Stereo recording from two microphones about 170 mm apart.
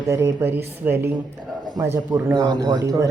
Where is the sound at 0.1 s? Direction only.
15° right (ahead or behind).